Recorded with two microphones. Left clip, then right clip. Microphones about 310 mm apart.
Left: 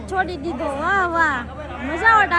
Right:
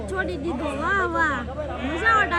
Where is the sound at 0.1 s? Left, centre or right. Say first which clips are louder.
Left 5 dB; centre.